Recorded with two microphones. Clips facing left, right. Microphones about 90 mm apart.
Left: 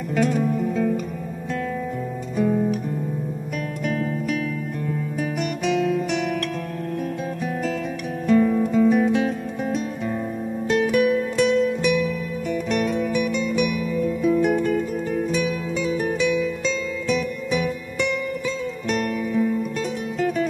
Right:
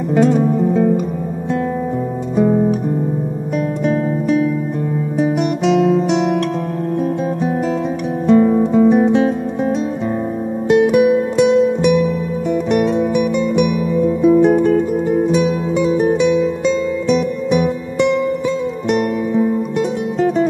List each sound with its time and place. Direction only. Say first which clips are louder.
0.1 s music: right 8 dB; 25° right (ahead or behind)
2.3 s guitar: right 7 dB; 30° right (ahead or behind)
3.8 s music: right 6 dB; 30° right (ahead or behind)
5.6 s guitar: right 7 dB; 25° right (ahead or behind)
8.3 s music: right 6 dB; 30° right (ahead or behind)